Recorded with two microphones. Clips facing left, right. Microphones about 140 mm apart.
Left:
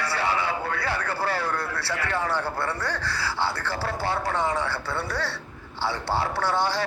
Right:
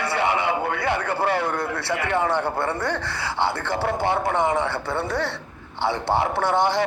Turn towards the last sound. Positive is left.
turn(degrees=-20)  # may be behind; listen again after turning